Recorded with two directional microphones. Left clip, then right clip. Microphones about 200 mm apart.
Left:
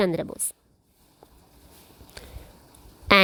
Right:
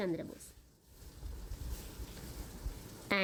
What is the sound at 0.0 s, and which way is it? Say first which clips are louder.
Speech: left 13 dB; 55° left (ahead or behind).